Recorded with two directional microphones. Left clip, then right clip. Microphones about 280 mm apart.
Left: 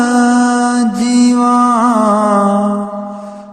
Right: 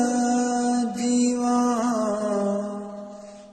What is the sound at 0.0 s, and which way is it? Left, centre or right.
Mantra, left.